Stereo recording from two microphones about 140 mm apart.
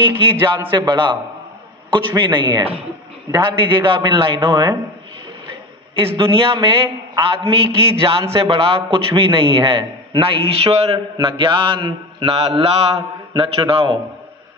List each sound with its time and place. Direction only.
0.0 s a man's voice: 40° right (ahead or behind)
5.9 s a man's voice: 40° right (ahead or behind)
11.1 s a man's voice: 35° right (ahead or behind)